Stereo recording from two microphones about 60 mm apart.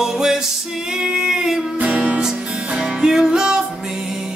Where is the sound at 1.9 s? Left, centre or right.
Right.